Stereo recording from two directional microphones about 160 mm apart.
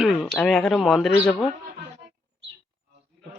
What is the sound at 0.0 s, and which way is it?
Speech, centre (ahead or behind).